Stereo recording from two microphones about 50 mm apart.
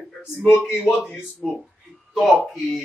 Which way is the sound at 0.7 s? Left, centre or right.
Centre.